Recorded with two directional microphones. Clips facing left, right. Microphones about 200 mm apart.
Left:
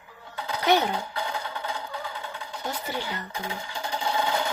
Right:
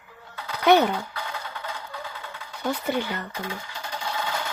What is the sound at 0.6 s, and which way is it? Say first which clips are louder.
Speech: right 5 dB; 60° right (ahead or behind).